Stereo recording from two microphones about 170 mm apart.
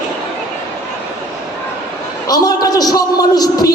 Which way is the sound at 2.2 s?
20° left (ahead or behind).